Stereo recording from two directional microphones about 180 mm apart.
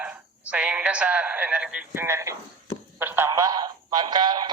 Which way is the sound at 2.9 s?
10° right (ahead or behind).